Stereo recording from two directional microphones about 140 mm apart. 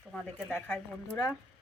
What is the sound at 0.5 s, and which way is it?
Speech, 15° left (ahead or behind).